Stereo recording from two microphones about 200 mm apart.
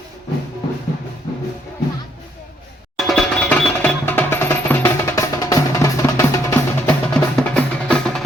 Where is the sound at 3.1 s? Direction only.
5° left (ahead or behind).